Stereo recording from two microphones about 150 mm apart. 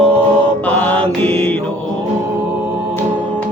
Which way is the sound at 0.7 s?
10° left (ahead or behind).